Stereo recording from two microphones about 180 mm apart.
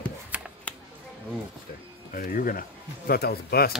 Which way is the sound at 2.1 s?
50° left (ahead or behind).